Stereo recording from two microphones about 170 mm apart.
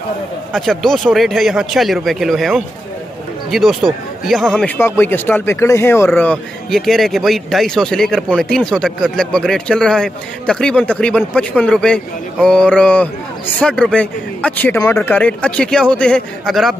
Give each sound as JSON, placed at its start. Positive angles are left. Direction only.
{"t": 0.5, "sound": "speech", "side_deg": 0}
{"t": 4.7, "sound": "speech", "side_deg": 15}